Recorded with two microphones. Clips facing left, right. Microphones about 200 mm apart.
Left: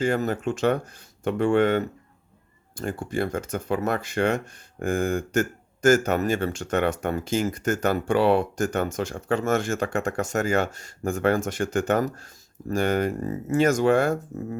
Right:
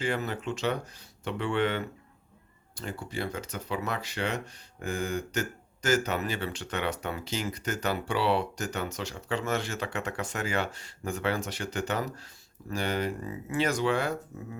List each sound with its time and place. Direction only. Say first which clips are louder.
0.0 s speech: left 7 dB; 45° left (ahead or behind)